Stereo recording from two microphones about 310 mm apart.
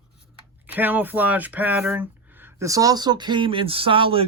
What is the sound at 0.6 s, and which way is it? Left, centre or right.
Speech, centre.